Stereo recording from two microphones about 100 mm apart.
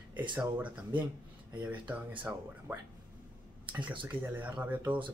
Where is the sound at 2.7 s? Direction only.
20° right (ahead or behind).